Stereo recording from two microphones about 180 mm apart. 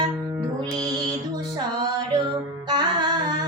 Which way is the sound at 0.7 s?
20° right (ahead or behind).